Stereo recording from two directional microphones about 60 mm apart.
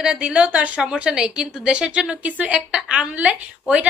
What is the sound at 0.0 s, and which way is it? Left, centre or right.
A woman's voice, centre.